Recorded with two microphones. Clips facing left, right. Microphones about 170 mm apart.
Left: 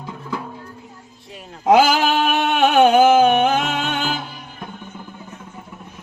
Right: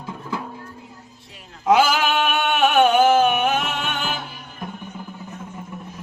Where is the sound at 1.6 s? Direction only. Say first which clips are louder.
Left 3 dB; 40° left (ahead or behind).